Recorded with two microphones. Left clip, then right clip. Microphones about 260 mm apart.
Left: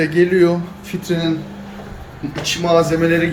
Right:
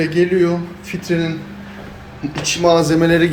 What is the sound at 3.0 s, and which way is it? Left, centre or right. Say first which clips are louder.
Speech: right 2 dB; right.